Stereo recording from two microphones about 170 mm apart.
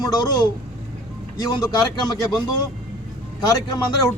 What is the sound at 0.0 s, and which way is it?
A man's voice, 25° left (ahead or behind).